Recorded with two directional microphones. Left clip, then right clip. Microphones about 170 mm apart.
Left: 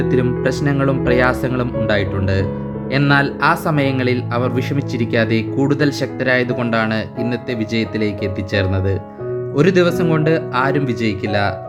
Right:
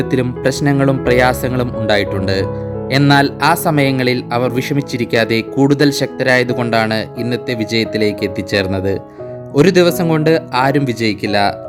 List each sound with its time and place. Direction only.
0.0 s speech: 40° right (ahead or behind)